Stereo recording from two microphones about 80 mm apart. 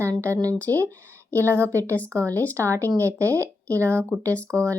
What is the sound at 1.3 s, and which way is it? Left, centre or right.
A woman's voice, right.